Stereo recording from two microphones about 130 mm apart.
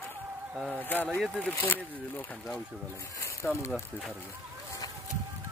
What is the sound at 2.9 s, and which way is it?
Speech, 25° left (ahead or behind).